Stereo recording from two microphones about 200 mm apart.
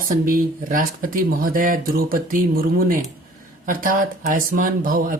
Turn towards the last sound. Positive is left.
turn(degrees=-45)  # may be behind; listen again after turning